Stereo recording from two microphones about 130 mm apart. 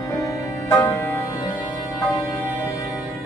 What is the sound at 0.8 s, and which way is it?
Music, 15° left (ahead or behind).